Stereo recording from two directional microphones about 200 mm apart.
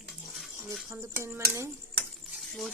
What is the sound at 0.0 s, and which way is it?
Dishes, centre (ahead or behind).